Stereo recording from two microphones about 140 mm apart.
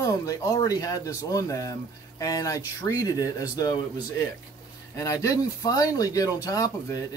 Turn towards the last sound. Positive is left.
turn(degrees=25)  # may be behind; listen again after turning